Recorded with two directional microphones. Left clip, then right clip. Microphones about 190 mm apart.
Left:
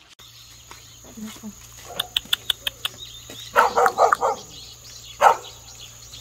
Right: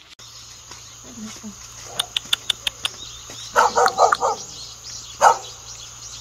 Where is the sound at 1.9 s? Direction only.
10° right (ahead or behind).